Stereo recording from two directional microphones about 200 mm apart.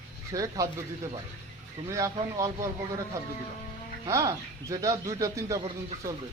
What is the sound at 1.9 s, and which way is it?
A man's voice, 15° right (ahead or behind).